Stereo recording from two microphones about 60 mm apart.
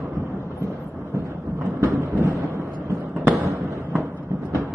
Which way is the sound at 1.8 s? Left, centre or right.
Right.